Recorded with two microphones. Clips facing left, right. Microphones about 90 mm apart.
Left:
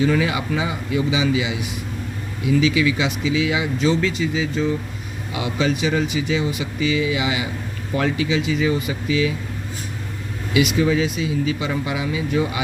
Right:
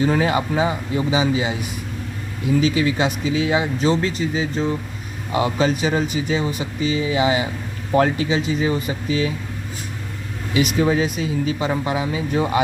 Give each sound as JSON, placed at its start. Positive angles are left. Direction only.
{"t": 0.0, "sound": "speech", "side_deg": -40}
{"t": 10.5, "sound": "speech", "side_deg": -40}